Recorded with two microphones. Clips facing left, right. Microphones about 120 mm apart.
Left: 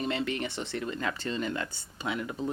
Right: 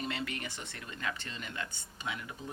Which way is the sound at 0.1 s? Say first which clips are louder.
Left 7 dB; 25° left (ahead or behind).